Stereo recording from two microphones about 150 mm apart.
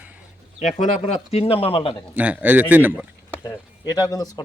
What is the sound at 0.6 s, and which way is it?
Speech, 50° left (ahead or behind).